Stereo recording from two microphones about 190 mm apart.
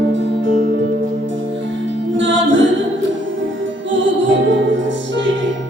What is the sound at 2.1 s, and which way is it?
Music, 75° right (ahead or behind).